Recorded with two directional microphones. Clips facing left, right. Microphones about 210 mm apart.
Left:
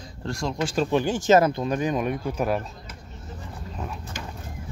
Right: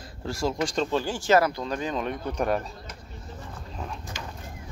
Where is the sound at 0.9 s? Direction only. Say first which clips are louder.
Left 4 dB; 20° left (ahead or behind).